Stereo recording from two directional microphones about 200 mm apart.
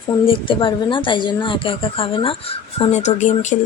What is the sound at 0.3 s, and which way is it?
A woman's voice, 25° left (ahead or behind).